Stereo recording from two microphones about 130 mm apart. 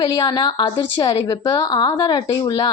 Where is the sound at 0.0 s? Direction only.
30° left (ahead or behind).